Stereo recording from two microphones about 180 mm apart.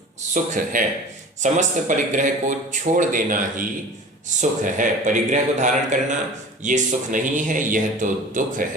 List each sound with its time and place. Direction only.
0.3 s a man's voice: 45° right (ahead or behind)